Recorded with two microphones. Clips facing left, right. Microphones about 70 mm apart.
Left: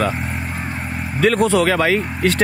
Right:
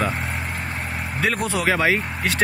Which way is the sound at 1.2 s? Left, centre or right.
Centre.